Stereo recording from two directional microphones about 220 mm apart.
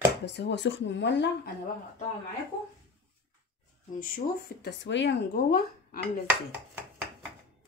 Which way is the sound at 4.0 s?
45° left (ahead or behind).